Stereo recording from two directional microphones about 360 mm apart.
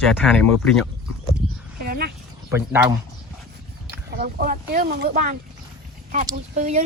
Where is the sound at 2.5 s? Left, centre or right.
Centre.